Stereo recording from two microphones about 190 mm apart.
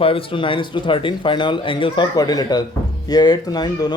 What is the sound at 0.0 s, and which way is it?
Speech, 30° left (ahead or behind).